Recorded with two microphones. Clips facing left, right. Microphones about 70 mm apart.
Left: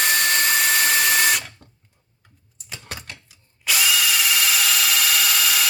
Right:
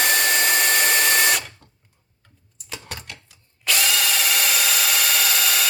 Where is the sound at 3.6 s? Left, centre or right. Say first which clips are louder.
Left 1 dB; centre.